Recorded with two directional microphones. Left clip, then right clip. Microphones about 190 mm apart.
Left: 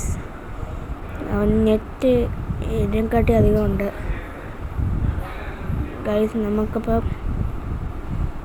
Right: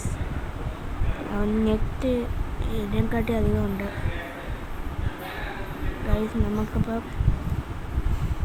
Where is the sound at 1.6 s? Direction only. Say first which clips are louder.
Left 7 dB; 15° left (ahead or behind).